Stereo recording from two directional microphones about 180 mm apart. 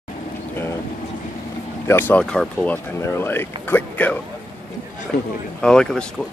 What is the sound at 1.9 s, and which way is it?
Speech, 10° left (ahead or behind).